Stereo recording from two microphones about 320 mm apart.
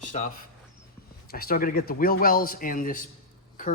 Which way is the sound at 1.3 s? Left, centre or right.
Left.